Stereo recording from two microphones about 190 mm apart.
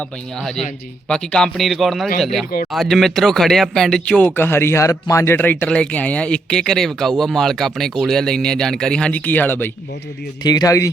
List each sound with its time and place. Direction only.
1.0 s a man's voice: 5° left (ahead or behind)